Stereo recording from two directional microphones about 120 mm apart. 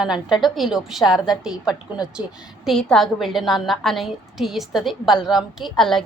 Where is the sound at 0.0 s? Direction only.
5° right (ahead or behind).